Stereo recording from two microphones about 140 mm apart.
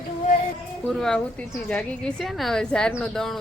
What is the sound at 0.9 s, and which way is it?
A woman's voice, 5° left (ahead or behind).